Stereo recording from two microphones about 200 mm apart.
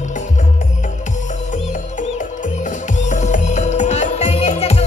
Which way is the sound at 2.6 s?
40° left (ahead or behind).